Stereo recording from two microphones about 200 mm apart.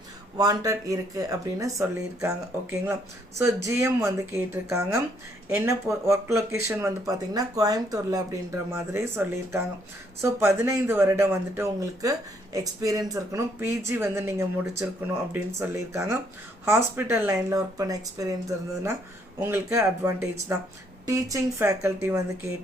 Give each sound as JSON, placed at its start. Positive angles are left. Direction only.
{"t": 0.3, "sound": "speech", "side_deg": -20}